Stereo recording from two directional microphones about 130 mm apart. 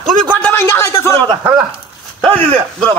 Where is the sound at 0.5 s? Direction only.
20° left (ahead or behind).